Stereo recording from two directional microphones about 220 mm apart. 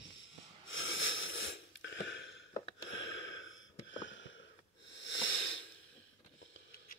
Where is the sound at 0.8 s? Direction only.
60° left (ahead or behind).